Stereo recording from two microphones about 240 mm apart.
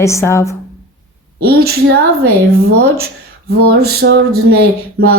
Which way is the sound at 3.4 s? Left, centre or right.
Right.